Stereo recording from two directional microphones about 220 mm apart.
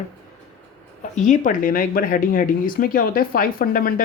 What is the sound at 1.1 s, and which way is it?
Speech, 35° left (ahead or behind).